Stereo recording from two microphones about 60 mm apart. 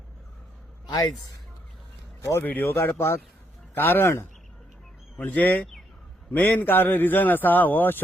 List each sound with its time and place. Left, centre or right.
2.4 s a man's voice: left
2.7 s a man's voice: left
5.1 s a man's voice: left